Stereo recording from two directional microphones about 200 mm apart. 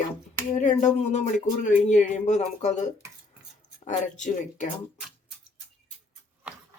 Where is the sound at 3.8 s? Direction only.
40° left (ahead or behind).